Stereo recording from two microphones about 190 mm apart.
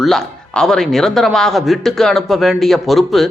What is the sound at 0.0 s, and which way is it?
Speech, centre (ahead or behind).